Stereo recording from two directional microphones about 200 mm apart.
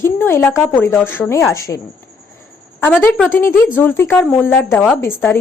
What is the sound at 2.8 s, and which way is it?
Speech, 10° left (ahead or behind).